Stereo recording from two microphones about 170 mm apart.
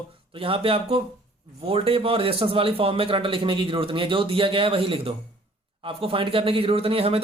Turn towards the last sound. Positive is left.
turn(degrees=-35)  # may be behind; listen again after turning